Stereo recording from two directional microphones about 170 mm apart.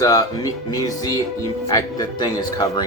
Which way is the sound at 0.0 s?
20° left (ahead or behind).